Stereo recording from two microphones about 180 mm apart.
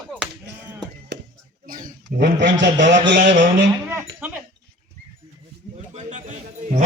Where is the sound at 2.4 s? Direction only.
80° right.